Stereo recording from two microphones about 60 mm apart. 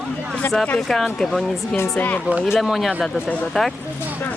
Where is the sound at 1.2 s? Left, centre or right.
Centre.